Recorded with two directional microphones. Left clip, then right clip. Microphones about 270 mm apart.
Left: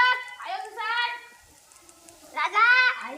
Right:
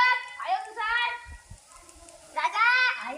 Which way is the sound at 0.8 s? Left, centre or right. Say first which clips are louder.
Left 3 dB; centre.